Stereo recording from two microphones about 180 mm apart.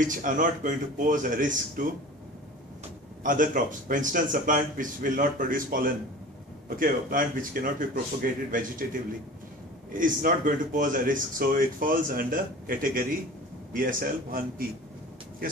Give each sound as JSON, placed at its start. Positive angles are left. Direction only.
{"t": 0.0, "sound": "speech", "side_deg": -45}
{"t": 3.3, "sound": "speech", "side_deg": -50}
{"t": 9.9, "sound": "speech", "side_deg": -50}